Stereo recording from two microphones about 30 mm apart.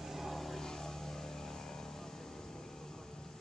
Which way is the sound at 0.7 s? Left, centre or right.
Centre.